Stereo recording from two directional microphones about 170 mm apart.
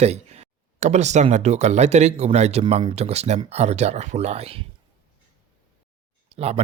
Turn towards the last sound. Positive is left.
turn(degrees=-35)  # may be behind; listen again after turning